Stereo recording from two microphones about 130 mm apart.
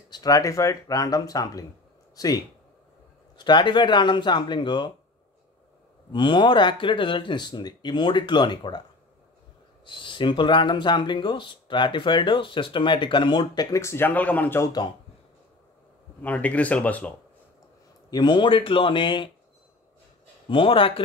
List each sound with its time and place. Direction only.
0.1 s speech: 30° left (ahead or behind)
6.1 s speech: 40° left (ahead or behind)
9.8 s speech: 40° left (ahead or behind); by 14.7 s 15° left (ahead or behind)
16.2 s speech: 10° left (ahead or behind)
18.1 s speech: 35° left (ahead or behind)
20.4 s a man's voice: 45° left (ahead or behind)